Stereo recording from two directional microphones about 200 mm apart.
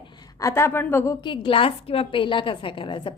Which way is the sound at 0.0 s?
20° left (ahead or behind).